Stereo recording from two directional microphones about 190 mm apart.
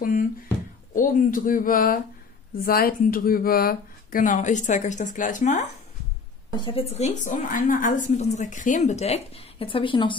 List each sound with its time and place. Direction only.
0.9 s speech: 45° left (ahead or behind)
6.5 s a woman's voice: 25° left (ahead or behind)